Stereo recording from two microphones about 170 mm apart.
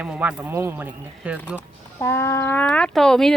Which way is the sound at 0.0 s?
10° right (ahead or behind).